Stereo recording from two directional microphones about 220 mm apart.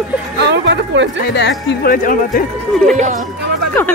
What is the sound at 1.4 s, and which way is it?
Speech, 50° left (ahead or behind).